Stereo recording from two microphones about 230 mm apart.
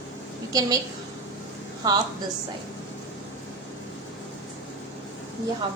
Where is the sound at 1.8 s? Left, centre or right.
Centre.